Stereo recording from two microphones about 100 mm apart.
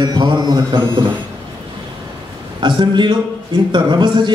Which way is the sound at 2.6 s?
50° right (ahead or behind).